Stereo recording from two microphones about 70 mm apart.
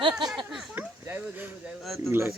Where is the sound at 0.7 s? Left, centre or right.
Right.